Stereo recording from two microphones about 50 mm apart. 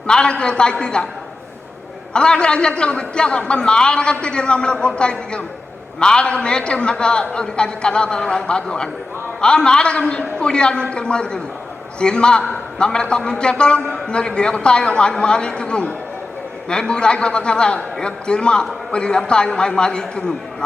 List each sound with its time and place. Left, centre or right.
0.1 s a man's voice: centre
2.1 s a man's voice: centre